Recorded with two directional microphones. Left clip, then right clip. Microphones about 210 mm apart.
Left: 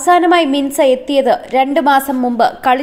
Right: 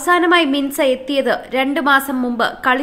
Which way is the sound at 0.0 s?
10° left (ahead or behind).